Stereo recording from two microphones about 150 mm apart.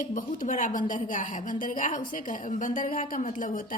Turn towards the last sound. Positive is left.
turn(degrees=65)  # may be behind; listen again after turning